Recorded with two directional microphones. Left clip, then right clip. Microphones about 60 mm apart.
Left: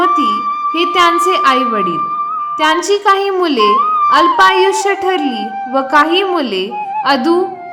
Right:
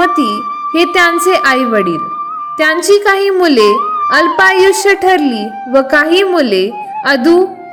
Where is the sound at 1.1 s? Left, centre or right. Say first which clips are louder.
Right 1 dB; right.